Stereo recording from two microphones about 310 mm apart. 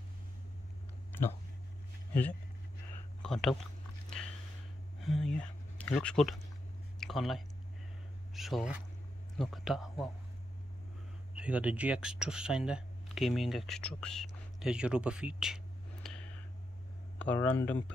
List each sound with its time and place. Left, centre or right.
3.2 s speech: centre
5.0 s speech: centre
11.3 s speech: centre